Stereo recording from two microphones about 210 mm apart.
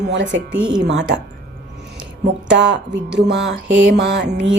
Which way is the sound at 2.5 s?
60° right (ahead or behind).